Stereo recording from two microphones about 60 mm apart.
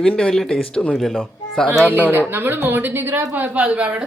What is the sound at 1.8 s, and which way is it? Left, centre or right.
A woman's voice, right.